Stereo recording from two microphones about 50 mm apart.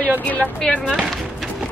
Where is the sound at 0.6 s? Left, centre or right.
Centre.